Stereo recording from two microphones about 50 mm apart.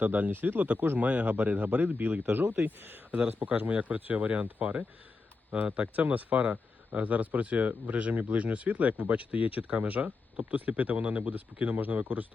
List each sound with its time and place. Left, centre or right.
0.0 s speech: right
3.1 s speech: right